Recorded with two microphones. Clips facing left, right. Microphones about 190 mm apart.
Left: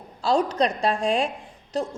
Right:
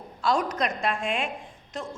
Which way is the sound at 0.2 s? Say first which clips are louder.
Left 4 dB; 30° left (ahead or behind).